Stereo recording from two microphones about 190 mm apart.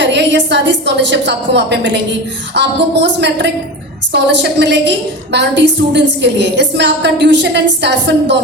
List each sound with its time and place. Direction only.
0.0 s a woman's voice: 65° right (ahead or behind)